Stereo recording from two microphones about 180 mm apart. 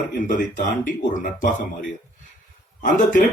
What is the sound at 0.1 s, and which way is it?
A man's voice, 50° left (ahead or behind).